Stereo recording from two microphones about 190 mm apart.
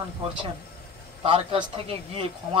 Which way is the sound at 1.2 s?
30° right (ahead or behind).